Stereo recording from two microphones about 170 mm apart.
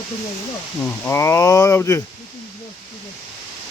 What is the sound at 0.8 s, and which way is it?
Speech, 10° left (ahead or behind).